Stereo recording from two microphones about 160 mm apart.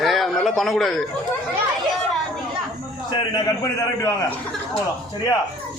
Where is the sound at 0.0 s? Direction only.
Centre (ahead or behind).